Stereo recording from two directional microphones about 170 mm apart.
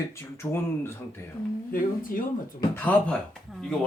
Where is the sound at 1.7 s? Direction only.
55° left (ahead or behind).